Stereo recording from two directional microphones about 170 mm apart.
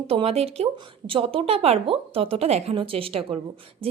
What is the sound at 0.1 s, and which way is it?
A woman's voice, 35° right (ahead or behind).